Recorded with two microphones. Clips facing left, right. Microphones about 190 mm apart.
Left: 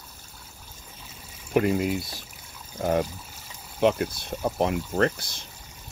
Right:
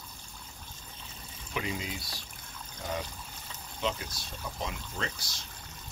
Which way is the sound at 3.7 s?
60° left (ahead or behind).